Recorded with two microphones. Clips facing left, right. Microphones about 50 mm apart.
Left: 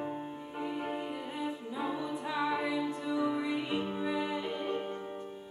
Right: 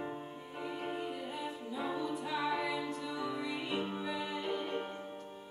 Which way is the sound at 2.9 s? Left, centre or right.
Centre.